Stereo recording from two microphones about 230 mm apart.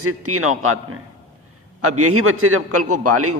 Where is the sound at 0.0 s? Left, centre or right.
Right.